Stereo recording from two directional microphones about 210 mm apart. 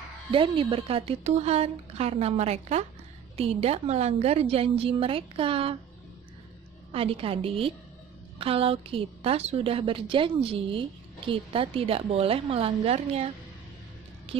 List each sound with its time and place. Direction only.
0.3 s a woman's voice: 25° right (ahead or behind)
6.9 s a woman's voice: 25° right (ahead or behind)